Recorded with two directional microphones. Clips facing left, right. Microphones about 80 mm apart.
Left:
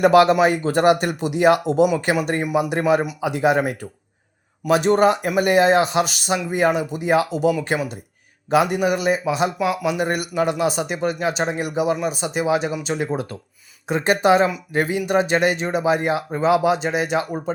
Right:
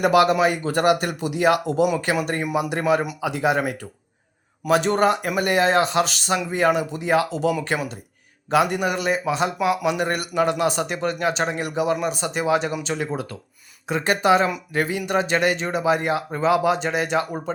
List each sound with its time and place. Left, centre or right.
0.0 s a man's voice: left; by 17.5 s centre